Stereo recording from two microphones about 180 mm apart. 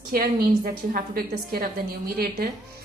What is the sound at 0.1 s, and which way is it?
A woman's voice, 55° right (ahead or behind).